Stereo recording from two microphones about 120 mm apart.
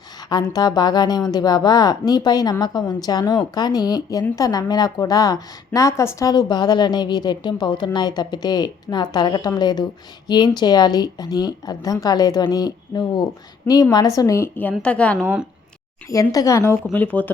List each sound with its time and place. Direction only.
0.2 s a woman's voice: 35° left (ahead or behind)
13.7 s a woman's voice: 15° left (ahead or behind)
14.2 s a woman's voice: 25° left (ahead or behind); by 15.2 s 10° left (ahead or behind)
15.2 s speech: 10° right (ahead or behind)
16.3 s a woman's voice: 30° left (ahead or behind)